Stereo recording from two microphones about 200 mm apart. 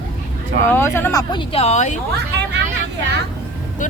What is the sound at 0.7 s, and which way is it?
Speech, 10° left (ahead or behind).